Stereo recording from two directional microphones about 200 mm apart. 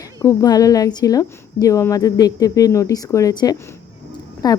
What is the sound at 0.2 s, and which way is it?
A woman's voice, 20° left (ahead or behind).